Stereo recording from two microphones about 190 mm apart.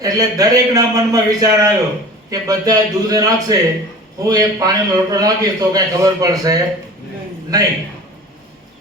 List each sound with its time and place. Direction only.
0.0 s a man's voice: 20° right (ahead or behind)